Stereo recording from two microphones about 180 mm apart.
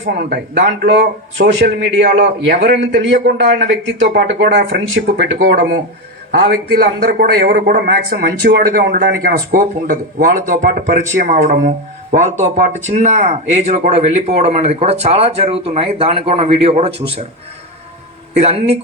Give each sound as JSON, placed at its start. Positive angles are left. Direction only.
{"t": 0.0, "sound": "a man's voice", "side_deg": -65}
{"t": 18.3, "sound": "speech", "side_deg": -35}